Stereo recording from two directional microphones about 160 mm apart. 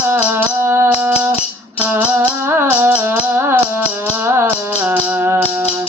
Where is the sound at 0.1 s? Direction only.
10° right (ahead or behind).